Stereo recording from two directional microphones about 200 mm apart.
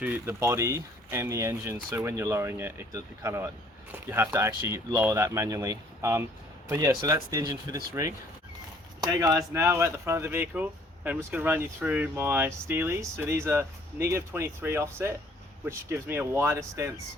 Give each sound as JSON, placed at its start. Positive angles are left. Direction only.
{"t": 0.0, "sound": "speech", "side_deg": -10}
{"t": 9.0, "sound": "speech", "side_deg": -15}